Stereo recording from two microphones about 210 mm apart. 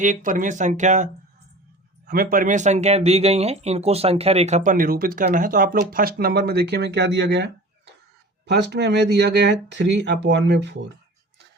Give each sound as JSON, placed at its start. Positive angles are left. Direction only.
{"t": 0.0, "sound": "speech", "side_deg": -35}